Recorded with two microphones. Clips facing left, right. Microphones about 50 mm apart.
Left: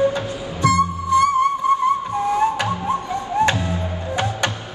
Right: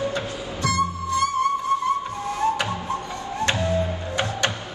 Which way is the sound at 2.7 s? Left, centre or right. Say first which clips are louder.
Left 6 dB; left.